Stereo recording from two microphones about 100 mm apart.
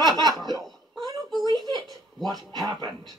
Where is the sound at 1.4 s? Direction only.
40° right (ahead or behind).